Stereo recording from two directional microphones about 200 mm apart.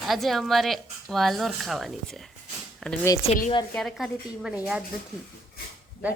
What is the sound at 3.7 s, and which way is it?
Speech, centre (ahead or behind).